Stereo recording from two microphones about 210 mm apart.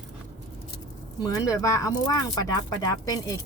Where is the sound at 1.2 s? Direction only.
15° left (ahead or behind).